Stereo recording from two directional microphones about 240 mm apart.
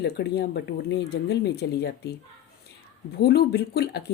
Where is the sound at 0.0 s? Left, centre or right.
Left.